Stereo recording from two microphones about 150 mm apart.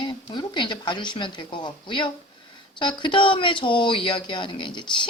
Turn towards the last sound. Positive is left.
turn(degrees=30)  # may be behind; listen again after turning